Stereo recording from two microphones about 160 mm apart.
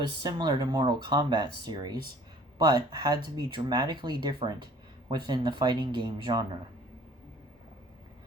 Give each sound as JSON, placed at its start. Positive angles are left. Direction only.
{"t": 0.2, "sound": "speech", "side_deg": -25}